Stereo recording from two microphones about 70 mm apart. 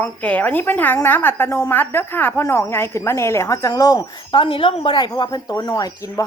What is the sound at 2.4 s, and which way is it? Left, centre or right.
A woman's voice, left.